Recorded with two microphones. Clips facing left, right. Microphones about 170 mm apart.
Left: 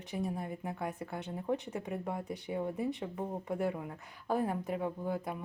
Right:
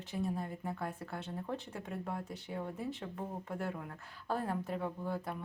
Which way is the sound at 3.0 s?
15° left (ahead or behind).